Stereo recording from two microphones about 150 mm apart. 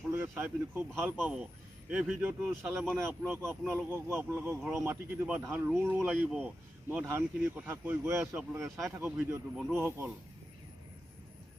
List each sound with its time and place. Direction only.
0.1 s speech: 15° right (ahead or behind)
9.7 s speech: 15° right (ahead or behind)